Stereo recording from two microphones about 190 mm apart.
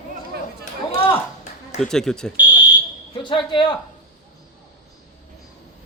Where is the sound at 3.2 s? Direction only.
25° left (ahead or behind).